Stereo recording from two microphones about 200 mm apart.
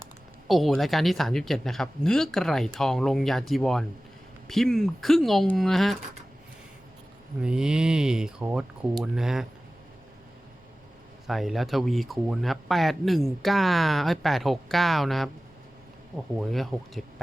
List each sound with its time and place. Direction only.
0.4 s speech: centre (ahead or behind)
7.4 s speech: 5° right (ahead or behind)
11.3 s speech: centre (ahead or behind)
16.4 s speech: centre (ahead or behind)